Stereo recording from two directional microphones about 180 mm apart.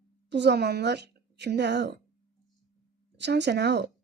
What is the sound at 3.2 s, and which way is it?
Speech, 70° right (ahead or behind).